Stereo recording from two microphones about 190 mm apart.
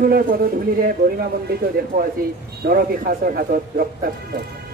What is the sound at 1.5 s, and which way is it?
A man's voice, 55° right (ahead or behind).